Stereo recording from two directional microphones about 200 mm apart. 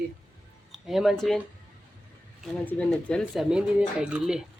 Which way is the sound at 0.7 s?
Centre (ahead or behind).